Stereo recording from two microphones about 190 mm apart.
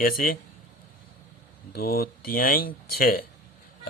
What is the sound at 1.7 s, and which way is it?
Speech, 55° left (ahead or behind).